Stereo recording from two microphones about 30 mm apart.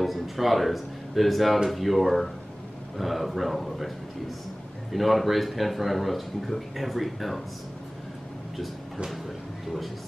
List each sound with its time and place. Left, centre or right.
0.0 s speech: centre
4.9 s speech: centre